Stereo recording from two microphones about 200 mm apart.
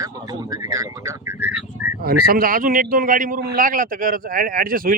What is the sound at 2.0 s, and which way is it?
A man's voice, 50° right (ahead or behind).